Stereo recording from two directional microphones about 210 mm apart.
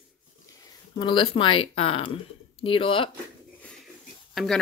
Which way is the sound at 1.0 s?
20° left (ahead or behind).